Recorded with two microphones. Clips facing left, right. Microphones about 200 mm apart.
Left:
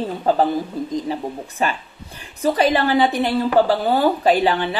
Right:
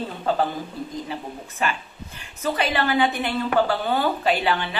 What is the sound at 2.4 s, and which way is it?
Speech, 35° left (ahead or behind).